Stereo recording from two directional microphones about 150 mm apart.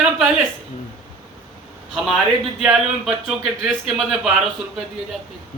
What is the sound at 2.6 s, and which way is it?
Speech, 5° right (ahead or behind).